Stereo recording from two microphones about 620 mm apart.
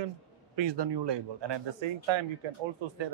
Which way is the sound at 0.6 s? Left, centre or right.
Right.